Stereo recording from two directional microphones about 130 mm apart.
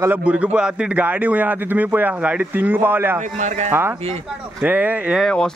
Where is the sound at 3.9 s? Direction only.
50° right (ahead or behind).